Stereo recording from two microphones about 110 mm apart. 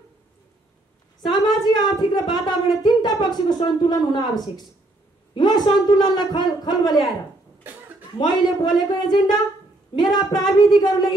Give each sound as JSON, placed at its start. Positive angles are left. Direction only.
{"t": 1.3, "sound": "a woman's voice", "side_deg": 40}
{"t": 5.3, "sound": "a man's voice", "side_deg": 40}
{"t": 8.2, "sound": "a man's voice", "side_deg": 40}